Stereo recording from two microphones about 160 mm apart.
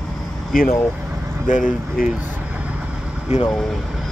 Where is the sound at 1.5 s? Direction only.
55° left (ahead or behind).